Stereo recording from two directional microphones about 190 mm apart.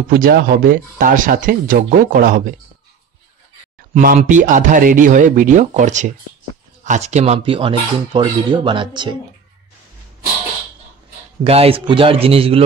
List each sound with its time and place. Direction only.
0.1 s speech: 50° right (ahead or behind)
3.9 s speech: 45° right (ahead or behind); by 9.1 s 25° right (ahead or behind)
11.4 s a man's voice: 30° right (ahead or behind)